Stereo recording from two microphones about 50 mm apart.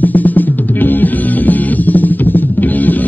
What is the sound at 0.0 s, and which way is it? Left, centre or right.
Music, left.